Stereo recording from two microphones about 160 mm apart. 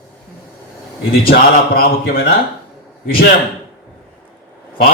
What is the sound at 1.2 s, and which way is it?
Speech, 70° left (ahead or behind).